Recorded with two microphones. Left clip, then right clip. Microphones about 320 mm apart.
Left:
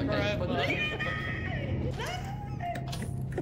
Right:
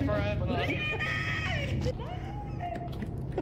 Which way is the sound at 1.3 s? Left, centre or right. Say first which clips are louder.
Right 4 dB; right.